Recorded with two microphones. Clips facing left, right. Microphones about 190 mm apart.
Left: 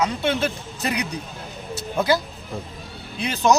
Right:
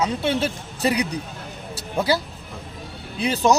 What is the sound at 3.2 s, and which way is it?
Speech, 35° right (ahead or behind).